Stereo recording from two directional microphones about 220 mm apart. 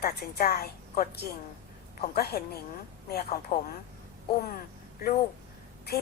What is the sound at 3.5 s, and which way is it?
Speech, 40° left (ahead or behind).